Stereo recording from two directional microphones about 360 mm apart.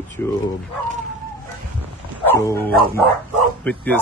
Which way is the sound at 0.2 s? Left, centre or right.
Centre.